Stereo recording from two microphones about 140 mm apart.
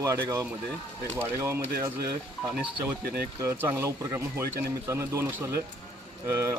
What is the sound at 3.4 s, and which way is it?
A man's voice, 20° right (ahead or behind).